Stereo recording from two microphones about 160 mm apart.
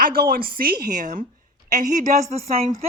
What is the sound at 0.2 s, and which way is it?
A woman's voice, 65° right (ahead or behind).